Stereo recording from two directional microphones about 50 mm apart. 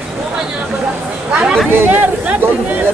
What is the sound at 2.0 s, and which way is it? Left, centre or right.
Speech, right.